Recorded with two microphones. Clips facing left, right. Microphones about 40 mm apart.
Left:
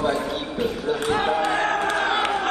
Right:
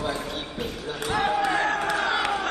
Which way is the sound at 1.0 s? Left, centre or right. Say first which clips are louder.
Left 1 dB; left.